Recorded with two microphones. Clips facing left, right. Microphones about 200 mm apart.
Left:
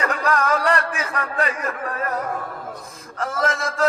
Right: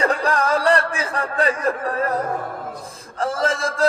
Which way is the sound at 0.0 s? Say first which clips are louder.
Right 2 dB; 30° right (ahead or behind).